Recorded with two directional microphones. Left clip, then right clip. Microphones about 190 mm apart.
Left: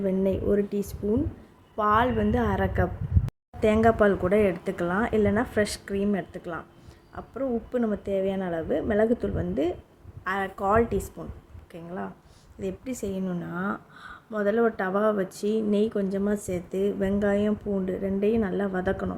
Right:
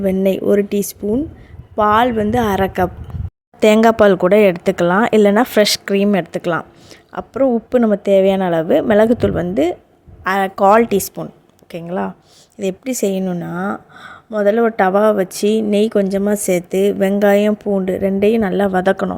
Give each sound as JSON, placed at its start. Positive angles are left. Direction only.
{"t": 0.0, "sound": "a woman's voice", "side_deg": -45}